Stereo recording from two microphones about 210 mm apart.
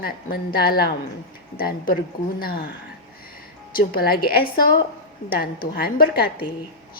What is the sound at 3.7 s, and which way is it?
A woman's voice, 45° left (ahead or behind).